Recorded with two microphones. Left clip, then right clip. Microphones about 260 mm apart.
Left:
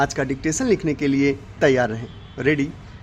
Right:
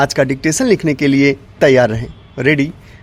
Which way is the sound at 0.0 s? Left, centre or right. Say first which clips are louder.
Right 8 dB; right.